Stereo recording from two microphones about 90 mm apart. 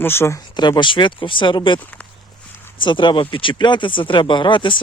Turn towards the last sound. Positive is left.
turn(degrees=65)  # may be behind; listen again after turning